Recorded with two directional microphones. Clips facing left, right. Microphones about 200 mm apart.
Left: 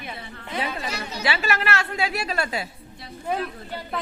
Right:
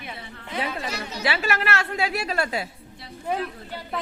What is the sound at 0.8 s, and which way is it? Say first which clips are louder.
Speech: even; 45° right (ahead or behind).